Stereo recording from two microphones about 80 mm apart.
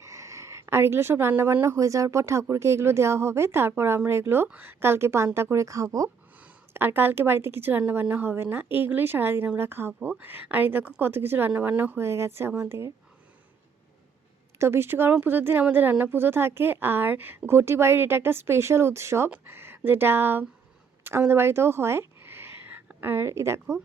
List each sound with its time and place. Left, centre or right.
0.0 s a woman's voice: right
4.4 s a woman's voice: centre
4.8 s a woman's voice: right
6.7 s a woman's voice: right
11.9 s a woman's voice: right
14.6 s a woman's voice: right